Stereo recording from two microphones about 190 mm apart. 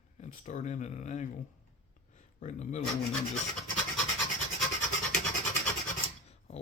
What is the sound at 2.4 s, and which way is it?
Speech, 40° left (ahead or behind).